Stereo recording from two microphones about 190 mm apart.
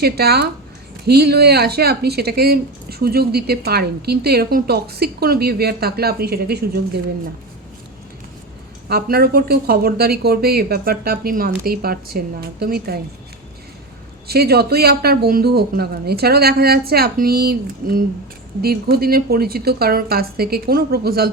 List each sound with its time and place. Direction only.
0.0 s a woman's voice: 55° right (ahead or behind)
8.9 s speech: 55° right (ahead or behind)
14.3 s a woman's voice: 55° right (ahead or behind)